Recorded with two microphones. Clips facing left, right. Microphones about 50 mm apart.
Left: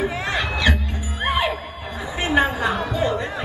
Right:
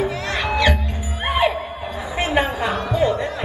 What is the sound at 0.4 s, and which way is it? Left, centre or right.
Music, right.